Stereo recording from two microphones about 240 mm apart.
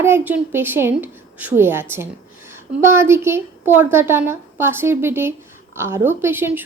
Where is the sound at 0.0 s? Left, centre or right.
Centre.